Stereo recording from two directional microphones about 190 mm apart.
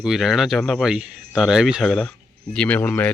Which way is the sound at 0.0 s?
Centre (ahead or behind).